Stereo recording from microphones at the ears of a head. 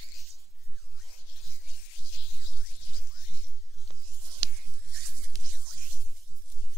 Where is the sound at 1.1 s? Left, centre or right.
Left.